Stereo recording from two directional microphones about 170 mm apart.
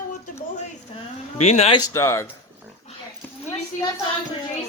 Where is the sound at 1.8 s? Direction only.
15° left (ahead or behind).